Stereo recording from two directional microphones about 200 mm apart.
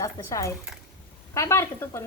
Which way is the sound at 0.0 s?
15° left (ahead or behind).